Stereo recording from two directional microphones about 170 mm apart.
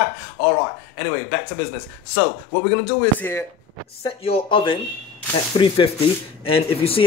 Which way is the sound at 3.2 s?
10° left (ahead or behind).